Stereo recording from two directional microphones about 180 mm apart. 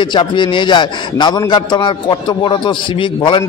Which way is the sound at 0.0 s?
25° left (ahead or behind).